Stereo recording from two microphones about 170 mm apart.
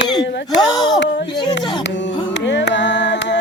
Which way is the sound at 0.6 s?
25° left (ahead or behind).